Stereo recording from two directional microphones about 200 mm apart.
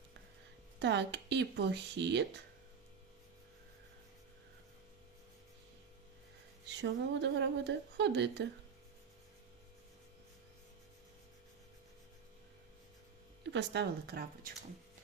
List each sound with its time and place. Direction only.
0.8 s a woman's voice: 60° right (ahead or behind)
6.7 s a woman's voice: 60° right (ahead or behind)
13.5 s a woman's voice: 60° right (ahead or behind)